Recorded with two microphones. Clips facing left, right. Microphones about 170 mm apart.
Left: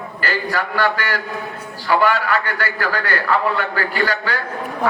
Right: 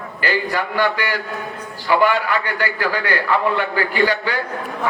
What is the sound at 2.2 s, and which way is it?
A man's voice, 45° left (ahead or behind).